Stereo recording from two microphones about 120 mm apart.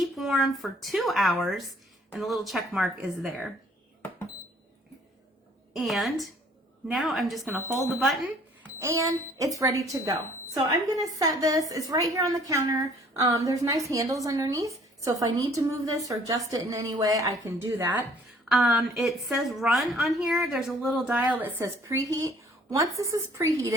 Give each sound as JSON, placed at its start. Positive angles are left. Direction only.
{"t": 0.0, "sound": "a woman's voice", "side_deg": 0}
{"t": 5.7, "sound": "a woman's voice", "side_deg": 0}
{"t": 8.8, "sound": "a woman's voice", "side_deg": -25}
{"t": 18.4, "sound": "a woman's voice", "side_deg": 0}